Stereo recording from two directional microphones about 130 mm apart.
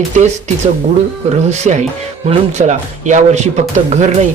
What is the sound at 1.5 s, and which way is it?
Speech, 60° right (ahead or behind).